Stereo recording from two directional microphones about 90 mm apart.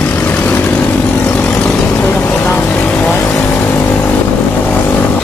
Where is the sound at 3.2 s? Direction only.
25° left (ahead or behind).